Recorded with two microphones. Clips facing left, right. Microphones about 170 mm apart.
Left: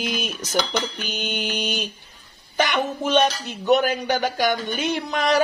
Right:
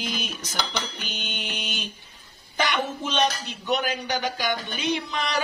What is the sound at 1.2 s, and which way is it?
Speech, 45° left (ahead or behind).